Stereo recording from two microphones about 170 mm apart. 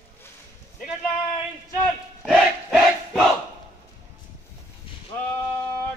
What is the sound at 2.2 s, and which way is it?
Crowd, centre (ahead or behind).